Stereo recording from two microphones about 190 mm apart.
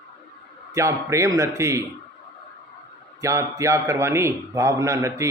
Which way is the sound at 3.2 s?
15° right (ahead or behind).